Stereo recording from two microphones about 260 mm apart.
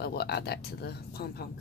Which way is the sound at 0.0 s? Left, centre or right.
Left.